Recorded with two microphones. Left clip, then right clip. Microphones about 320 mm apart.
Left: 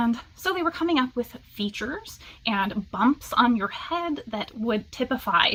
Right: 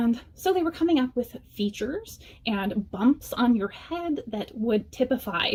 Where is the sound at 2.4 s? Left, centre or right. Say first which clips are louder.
Left 3 dB; centre.